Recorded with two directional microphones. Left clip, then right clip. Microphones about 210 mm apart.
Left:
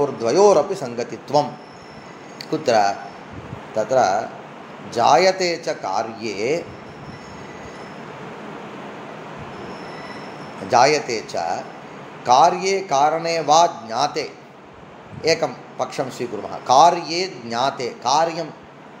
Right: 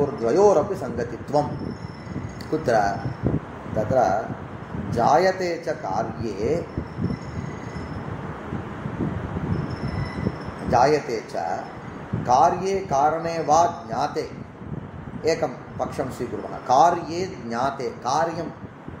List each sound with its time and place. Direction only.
0.0 s a man's voice: 15° left (ahead or behind)
2.5 s a man's voice: 15° left (ahead or behind)
10.7 s a man's voice: 15° left (ahead or behind)
15.2 s a man's voice: 15° left (ahead or behind)